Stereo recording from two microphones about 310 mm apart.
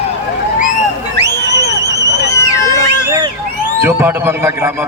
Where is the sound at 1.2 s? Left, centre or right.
Right.